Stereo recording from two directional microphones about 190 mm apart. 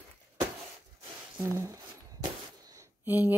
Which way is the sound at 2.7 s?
10° right (ahead or behind).